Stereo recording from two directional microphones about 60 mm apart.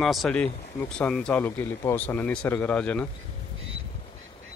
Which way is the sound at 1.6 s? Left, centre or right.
Left.